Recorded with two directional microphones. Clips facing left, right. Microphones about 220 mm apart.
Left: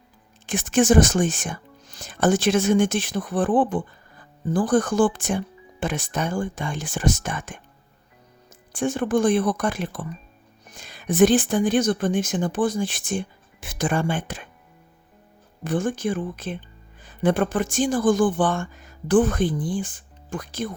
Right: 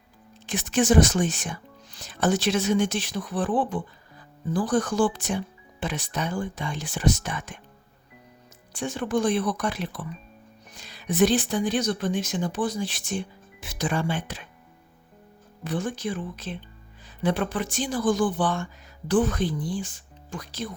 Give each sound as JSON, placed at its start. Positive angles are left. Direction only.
{"t": 0.4, "sound": "speech", "side_deg": 50}
{"t": 8.7, "sound": "speech", "side_deg": 50}
{"t": 15.6, "sound": "speech", "side_deg": 50}